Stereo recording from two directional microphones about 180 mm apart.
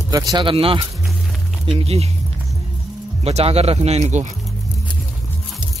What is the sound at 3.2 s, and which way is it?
Speech, 35° right (ahead or behind).